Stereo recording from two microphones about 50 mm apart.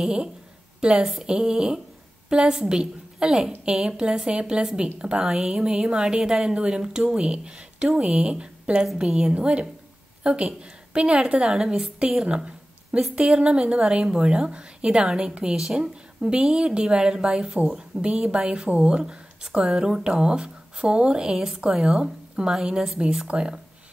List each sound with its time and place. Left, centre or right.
0.0 s a woman's voice: centre
12.3 s a sound: centre
13.1 s a woman's voice: centre
22.0 s speech: centre
22.5 s a woman's voice: centre
22.9 s a woman's voice: centre